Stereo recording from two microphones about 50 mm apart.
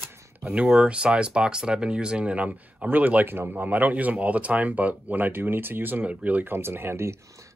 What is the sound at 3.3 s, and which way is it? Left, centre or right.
Speech, right.